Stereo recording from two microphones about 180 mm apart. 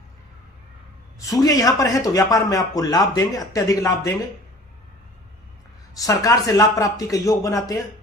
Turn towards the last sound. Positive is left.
turn(degrees=20)  # may be behind; listen again after turning